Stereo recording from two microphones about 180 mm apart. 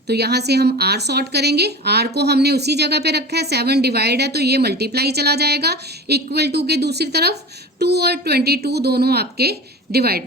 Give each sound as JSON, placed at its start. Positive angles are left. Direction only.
{"t": 0.1, "sound": "a woman's voice", "side_deg": -65}